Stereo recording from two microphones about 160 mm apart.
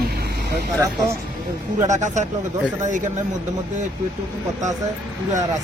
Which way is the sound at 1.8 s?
50° right (ahead or behind).